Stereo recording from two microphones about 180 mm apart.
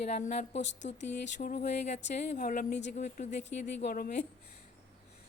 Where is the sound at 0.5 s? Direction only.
80° left.